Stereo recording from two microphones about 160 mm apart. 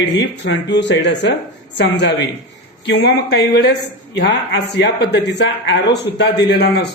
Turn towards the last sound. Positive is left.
turn(degrees=90)